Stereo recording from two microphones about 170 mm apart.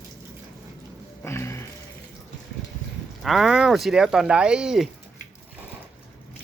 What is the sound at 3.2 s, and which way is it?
Speech, centre (ahead or behind).